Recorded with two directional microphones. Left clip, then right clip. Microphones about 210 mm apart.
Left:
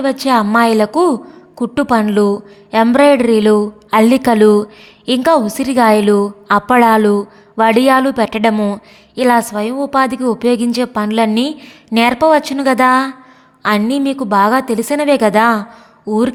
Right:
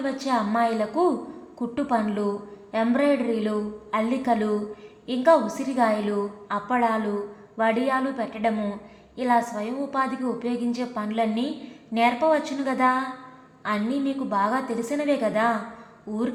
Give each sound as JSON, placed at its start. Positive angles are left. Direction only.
{"t": 0.0, "sound": "a woman's voice", "side_deg": 50}